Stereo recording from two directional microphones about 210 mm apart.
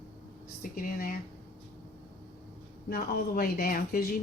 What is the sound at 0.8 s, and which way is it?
Speech, 40° left (ahead or behind).